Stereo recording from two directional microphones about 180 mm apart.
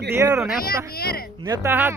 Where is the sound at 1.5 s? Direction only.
15° right (ahead or behind).